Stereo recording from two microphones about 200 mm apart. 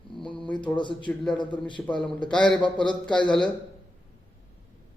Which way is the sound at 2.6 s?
25° left (ahead or behind).